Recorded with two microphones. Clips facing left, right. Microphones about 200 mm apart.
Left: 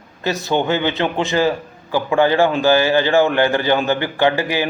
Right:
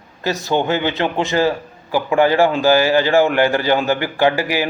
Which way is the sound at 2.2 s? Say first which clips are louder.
Right 1 dB; 20° left (ahead or behind).